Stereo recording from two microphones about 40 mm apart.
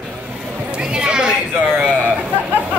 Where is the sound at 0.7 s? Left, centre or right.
Right.